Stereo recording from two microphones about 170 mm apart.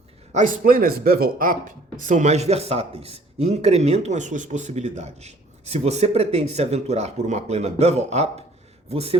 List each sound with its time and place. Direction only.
0.3 s speech: 55° right (ahead or behind); by 9.1 s 35° right (ahead or behind)